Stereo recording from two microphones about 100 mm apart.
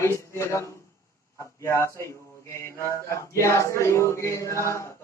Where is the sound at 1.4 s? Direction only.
30° left (ahead or behind).